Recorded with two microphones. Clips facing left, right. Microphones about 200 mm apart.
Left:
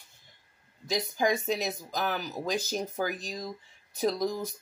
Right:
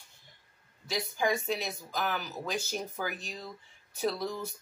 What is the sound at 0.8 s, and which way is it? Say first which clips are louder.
Speech: left 3 dB; 40° left (ahead or behind).